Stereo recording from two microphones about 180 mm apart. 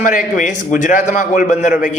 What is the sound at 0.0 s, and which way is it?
A man's voice, 45° left (ahead or behind).